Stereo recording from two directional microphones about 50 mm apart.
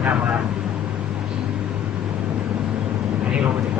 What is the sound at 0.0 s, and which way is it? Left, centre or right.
Vehicle, right.